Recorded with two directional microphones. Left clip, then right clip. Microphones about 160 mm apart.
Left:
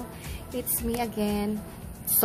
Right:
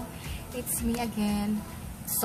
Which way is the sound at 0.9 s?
40° left (ahead or behind).